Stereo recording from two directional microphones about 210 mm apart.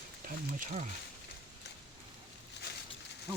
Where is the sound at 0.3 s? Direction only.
40° right (ahead or behind).